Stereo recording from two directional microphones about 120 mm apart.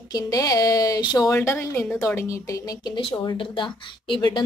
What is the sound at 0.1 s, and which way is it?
A woman's voice, 30° left (ahead or behind).